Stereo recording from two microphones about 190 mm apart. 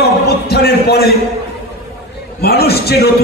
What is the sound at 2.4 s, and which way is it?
Speech, 55° left (ahead or behind).